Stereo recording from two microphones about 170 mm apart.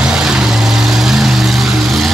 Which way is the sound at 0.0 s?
5° right (ahead or behind).